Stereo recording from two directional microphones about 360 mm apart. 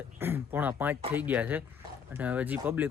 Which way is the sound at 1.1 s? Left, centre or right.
Centre.